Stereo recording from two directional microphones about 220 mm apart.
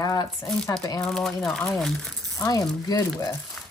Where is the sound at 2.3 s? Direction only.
15° left (ahead or behind).